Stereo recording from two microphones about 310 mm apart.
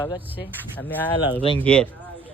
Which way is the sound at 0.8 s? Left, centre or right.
Centre.